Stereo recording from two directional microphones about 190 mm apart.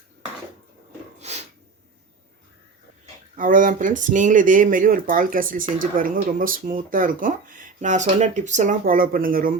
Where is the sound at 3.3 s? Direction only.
45° right (ahead or behind).